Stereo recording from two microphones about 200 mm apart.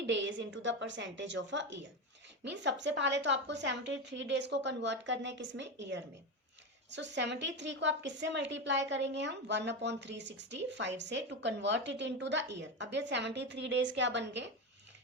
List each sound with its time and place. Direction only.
0.0 s a woman's voice: 65° right (ahead or behind)